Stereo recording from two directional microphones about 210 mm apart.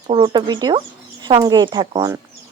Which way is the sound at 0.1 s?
20° right (ahead or behind).